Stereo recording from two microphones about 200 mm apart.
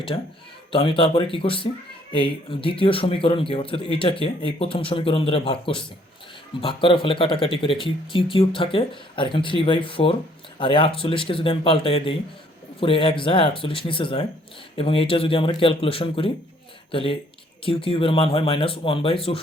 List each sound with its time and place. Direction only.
0.7 s speech: 25° left (ahead or behind)